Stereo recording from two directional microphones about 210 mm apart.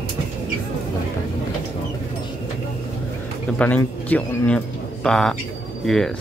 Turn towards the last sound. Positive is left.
turn(degrees=0)  # may be behind; listen again after turning